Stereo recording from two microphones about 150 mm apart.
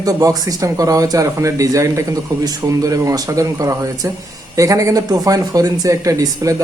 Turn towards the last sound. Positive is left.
turn(degrees=-20)  # may be behind; listen again after turning